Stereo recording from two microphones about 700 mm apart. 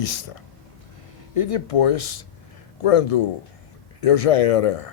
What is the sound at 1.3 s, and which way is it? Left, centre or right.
A man's voice, left.